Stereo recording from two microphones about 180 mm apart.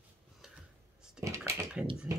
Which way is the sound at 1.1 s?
15° right (ahead or behind).